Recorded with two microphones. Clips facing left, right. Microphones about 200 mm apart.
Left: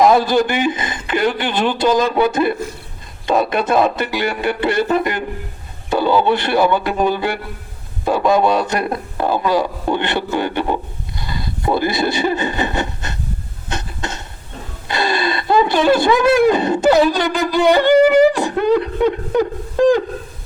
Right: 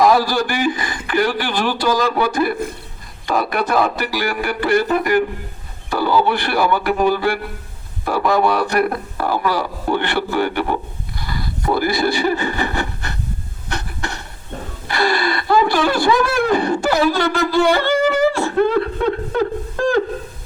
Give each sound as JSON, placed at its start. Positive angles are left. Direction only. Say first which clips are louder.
{"t": 0.0, "sound": "a man's voice", "louder": "left 2 dB", "side_deg": 20}
{"t": 11.2, "sound": "a sound", "louder": "even", "side_deg": 20}
{"t": 14.8, "sound": "speech", "louder": "even", "side_deg": 20}
{"t": 19.3, "sound": "beatboxing", "louder": "left 2 dB", "side_deg": 15}